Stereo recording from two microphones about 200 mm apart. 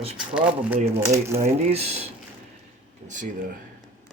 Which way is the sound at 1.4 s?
30° right (ahead or behind).